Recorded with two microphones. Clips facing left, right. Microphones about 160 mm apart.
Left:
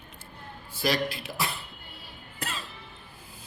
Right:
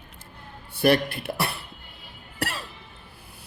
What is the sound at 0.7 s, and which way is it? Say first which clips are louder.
Speech: right 7 dB; 60° right (ahead or behind).